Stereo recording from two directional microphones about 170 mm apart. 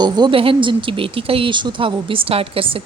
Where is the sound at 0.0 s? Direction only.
30° right (ahead or behind).